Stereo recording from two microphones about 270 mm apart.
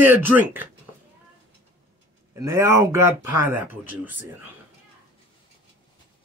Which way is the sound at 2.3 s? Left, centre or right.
Centre.